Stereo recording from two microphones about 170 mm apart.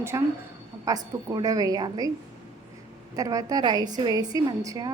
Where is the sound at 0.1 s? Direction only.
20° right (ahead or behind).